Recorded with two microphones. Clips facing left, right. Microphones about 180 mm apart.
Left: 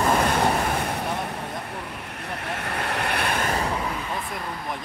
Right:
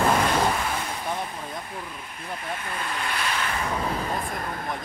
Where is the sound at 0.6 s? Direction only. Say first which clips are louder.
Left 4 dB; 55° left (ahead or behind).